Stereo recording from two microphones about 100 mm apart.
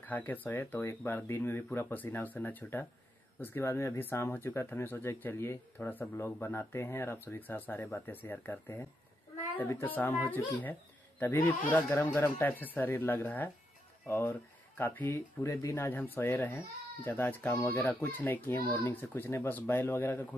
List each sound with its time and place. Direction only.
0.0 s speech: 15° left (ahead or behind)
9.8 s speech: 20° left (ahead or behind)
17.5 s speech: 30° left (ahead or behind)
17.7 s speech: 20° left (ahead or behind)